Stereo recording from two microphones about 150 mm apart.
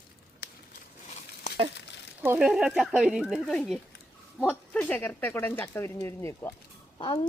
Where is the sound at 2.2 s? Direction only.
5° right (ahead or behind); by 6.5 s 20° left (ahead or behind).